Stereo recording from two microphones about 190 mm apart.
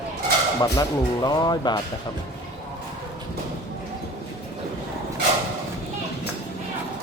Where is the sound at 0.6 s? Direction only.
20° left (ahead or behind).